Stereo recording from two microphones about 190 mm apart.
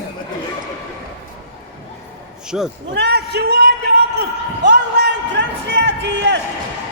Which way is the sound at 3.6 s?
60° right (ahead or behind).